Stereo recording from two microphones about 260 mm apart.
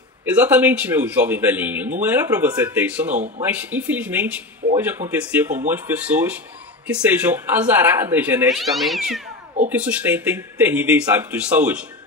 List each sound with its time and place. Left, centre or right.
0.2 s speech: centre
3.1 s speech: right
3.5 s speech: centre